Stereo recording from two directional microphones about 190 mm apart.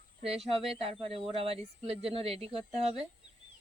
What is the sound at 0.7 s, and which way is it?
A man's voice, 30° right (ahead or behind).